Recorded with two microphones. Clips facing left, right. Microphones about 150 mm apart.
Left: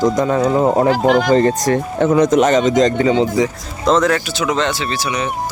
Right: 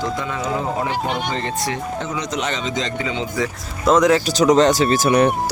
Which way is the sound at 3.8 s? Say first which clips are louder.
Left 1 dB; 10° right (ahead or behind).